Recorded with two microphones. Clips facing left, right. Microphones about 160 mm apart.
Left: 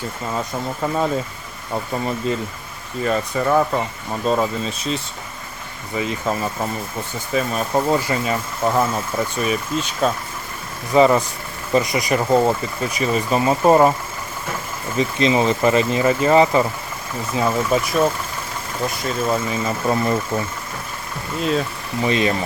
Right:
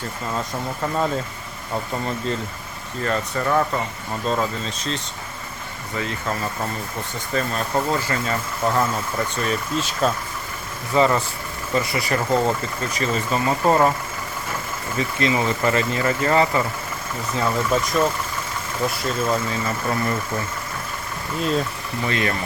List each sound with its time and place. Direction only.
0.3 s speech: 10° left (ahead or behind)
6.0 s speech: 15° left (ahead or behind)
10.9 s speech: 15° left (ahead or behind)
14.9 s speech: 20° left (ahead or behind); by 19.4 s 5° left (ahead or behind)
19.5 s speech: 20° left (ahead or behind)
22.0 s speech: 20° left (ahead or behind)